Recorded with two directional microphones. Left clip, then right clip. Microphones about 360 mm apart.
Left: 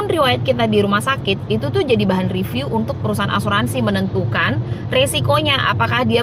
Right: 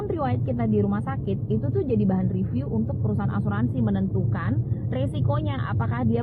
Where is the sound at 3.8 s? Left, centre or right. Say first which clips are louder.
Left 9 dB; left.